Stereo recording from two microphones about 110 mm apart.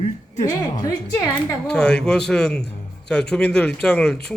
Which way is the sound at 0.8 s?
30° left (ahead or behind).